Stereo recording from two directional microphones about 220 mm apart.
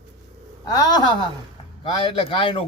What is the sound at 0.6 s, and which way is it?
A man's voice, 15° left (ahead or behind).